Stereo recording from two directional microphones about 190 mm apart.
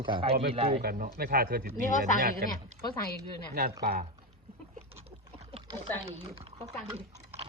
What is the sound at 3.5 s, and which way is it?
Speech, 55° right (ahead or behind).